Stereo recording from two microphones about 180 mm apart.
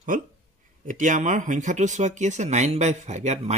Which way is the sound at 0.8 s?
45° right (ahead or behind).